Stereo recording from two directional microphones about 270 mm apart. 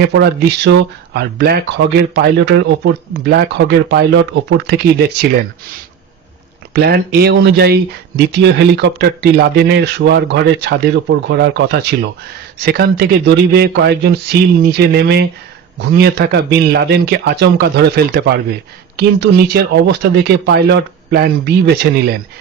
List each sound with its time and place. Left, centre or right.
0.0 s speech: right
6.7 s speech: right